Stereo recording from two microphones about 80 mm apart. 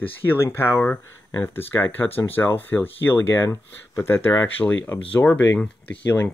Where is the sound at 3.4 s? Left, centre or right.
Left.